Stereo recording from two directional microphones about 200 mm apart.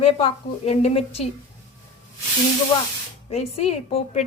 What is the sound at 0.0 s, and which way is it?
A woman's voice, 30° left (ahead or behind).